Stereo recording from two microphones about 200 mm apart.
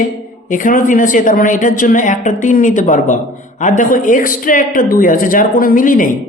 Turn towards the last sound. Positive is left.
turn(degrees=40)  # may be behind; listen again after turning